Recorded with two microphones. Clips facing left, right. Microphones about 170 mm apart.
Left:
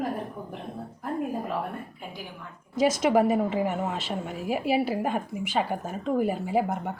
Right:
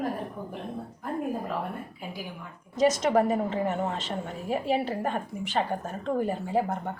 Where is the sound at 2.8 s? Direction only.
10° left (ahead or behind).